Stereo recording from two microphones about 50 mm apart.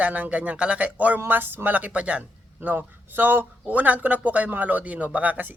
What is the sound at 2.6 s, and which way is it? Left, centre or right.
A man's voice, right.